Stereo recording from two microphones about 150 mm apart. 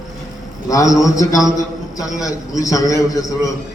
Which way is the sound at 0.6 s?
20° left (ahead or behind).